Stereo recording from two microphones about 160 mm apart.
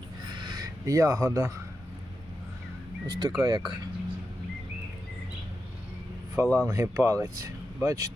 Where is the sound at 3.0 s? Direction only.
25° right (ahead or behind).